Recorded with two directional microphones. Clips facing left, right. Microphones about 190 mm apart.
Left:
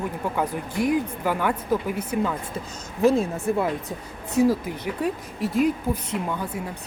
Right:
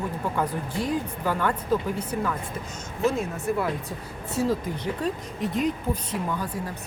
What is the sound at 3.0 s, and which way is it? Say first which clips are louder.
Speech: left 5 dB; 35° left (ahead or behind).